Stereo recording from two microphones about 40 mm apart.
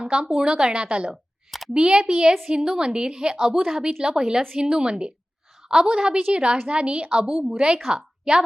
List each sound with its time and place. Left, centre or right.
0.0 s a woman's voice: right
1.1 s a sound: centre
1.7 s a woman's voice: centre
3.6 s a woman's voice: centre
3.8 s a woman's voice: centre